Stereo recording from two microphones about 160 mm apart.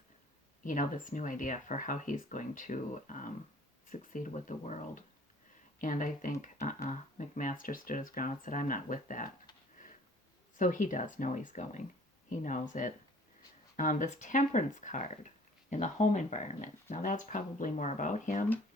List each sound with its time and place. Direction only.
0.6 s speech: 55° left (ahead or behind)
10.6 s speech: 55° left (ahead or behind)